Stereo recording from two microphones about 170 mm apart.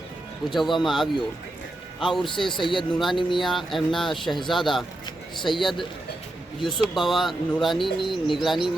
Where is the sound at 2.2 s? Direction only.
30° left (ahead or behind).